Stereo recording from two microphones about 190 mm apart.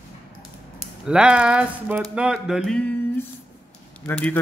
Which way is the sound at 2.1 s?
5° right (ahead or behind).